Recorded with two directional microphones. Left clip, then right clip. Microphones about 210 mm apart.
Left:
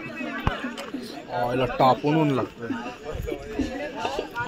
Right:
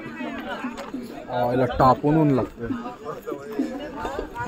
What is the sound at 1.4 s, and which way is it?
Speech, 30° right (ahead or behind).